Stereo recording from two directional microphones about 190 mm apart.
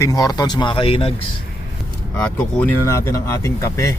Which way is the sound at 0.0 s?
15° left (ahead or behind).